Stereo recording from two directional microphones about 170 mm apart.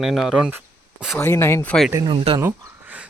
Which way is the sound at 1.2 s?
15° left (ahead or behind).